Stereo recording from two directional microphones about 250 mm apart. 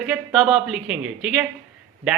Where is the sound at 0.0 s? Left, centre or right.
Centre.